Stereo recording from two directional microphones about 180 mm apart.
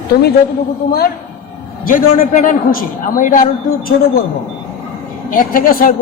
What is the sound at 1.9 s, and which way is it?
A man's voice, 50° left (ahead or behind).